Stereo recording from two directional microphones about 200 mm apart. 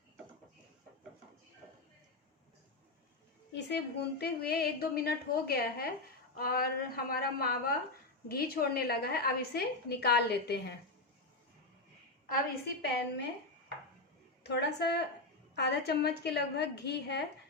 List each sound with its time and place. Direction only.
3.5 s a woman's voice: 55° left (ahead or behind)
12.2 s a woman's voice: 50° left (ahead or behind)
14.4 s a woman's voice: 55° left (ahead or behind)